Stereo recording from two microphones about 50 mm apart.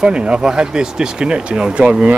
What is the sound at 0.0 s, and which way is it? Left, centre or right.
Speech, centre.